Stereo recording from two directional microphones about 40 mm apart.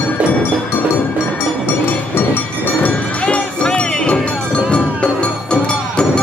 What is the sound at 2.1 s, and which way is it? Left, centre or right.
Train, left.